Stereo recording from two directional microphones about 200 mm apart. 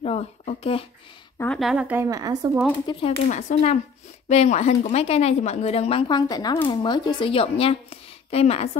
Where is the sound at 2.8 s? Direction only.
25° left (ahead or behind).